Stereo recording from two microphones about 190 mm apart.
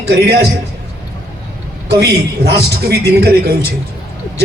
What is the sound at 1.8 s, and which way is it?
A man's voice, 60° right (ahead or behind).